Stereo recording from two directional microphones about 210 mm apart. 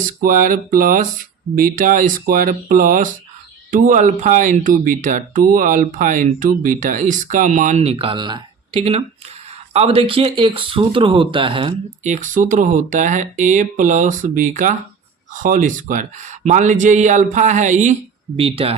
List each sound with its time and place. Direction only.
0.0 s speech: 40° right (ahead or behind)